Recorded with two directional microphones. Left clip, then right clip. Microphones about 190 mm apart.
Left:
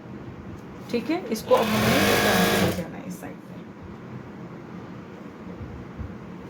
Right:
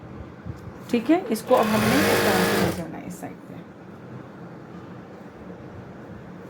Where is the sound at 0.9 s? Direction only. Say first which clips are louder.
Right 5 dB; 35° right (ahead or behind).